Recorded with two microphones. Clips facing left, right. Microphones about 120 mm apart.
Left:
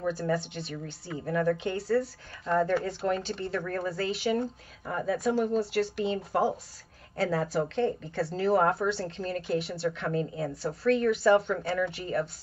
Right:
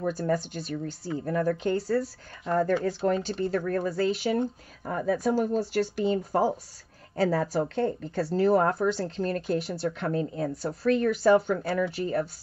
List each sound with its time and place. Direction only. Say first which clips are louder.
0.0 s speech: right 2 dB; 40° right (ahead or behind)
3.3 s speech: right 5 dB; 40° right (ahead or behind)